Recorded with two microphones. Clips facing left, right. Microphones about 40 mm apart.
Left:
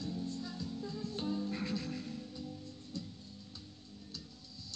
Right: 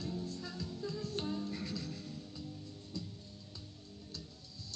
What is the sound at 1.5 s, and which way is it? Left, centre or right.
Music, left.